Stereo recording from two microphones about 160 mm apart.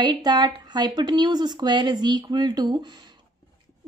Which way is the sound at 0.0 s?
25° right (ahead or behind).